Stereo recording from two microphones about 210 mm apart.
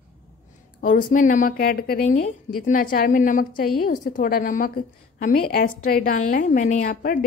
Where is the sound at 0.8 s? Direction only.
40° left (ahead or behind).